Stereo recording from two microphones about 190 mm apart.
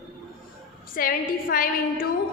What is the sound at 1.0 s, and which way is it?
A woman's voice, 50° left (ahead or behind).